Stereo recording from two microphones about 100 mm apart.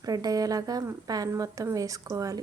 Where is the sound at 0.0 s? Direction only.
40° right (ahead or behind).